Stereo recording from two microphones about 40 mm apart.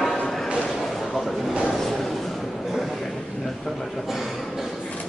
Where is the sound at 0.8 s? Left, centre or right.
Centre.